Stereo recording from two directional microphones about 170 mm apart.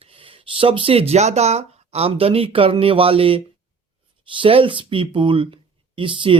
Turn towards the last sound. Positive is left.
turn(degrees=-30)  # may be behind; listen again after turning